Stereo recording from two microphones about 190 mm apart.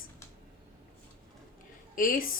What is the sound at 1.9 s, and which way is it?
Speech, 45° left (ahead or behind).